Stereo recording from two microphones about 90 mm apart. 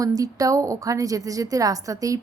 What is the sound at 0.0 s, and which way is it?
A woman's voice, 40° right (ahead or behind).